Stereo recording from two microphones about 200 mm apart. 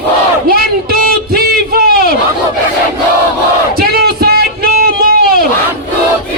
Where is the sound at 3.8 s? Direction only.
50° right (ahead or behind).